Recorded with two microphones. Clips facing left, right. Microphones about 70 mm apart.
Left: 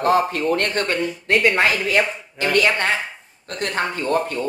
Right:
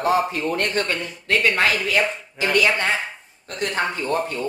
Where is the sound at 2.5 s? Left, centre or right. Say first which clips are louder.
Left 1 dB; left.